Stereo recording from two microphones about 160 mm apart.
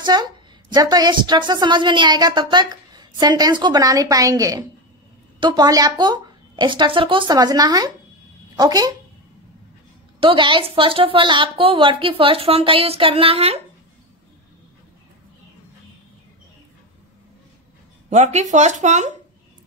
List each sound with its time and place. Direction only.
0.0 s a woman's voice: 25° right (ahead or behind)
10.2 s a woman's voice: 30° right (ahead or behind)
18.1 s speech: 50° right (ahead or behind)